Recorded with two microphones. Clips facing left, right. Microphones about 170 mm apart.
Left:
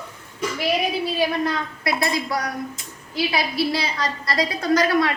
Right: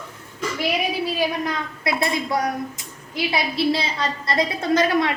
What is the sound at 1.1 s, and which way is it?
A woman's voice, 15° right (ahead or behind).